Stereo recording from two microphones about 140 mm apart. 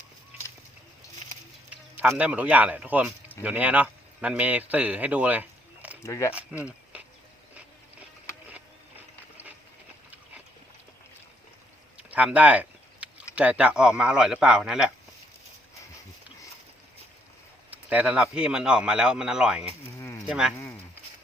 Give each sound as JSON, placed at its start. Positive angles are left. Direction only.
{"t": 2.0, "sound": "a man's voice", "side_deg": -10}
{"t": 6.0, "sound": "speech", "side_deg": 20}
{"t": 12.1, "sound": "a sound", "side_deg": -10}
{"t": 13.3, "sound": "speech", "side_deg": -10}
{"t": 17.7, "sound": "speech", "side_deg": -10}
{"t": 20.0, "sound": "livestock", "side_deg": 20}
{"t": 20.2, "sound": "speech", "side_deg": -5}